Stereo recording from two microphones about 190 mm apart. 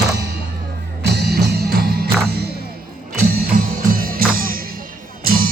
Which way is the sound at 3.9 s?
50° right (ahead or behind).